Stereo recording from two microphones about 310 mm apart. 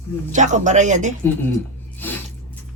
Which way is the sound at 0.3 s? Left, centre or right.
Right.